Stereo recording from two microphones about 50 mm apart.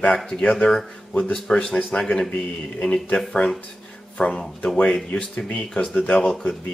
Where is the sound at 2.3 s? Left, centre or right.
Left.